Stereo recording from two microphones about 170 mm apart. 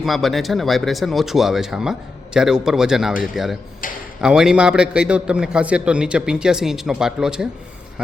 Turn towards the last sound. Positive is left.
turn(degrees=-5)  # may be behind; listen again after turning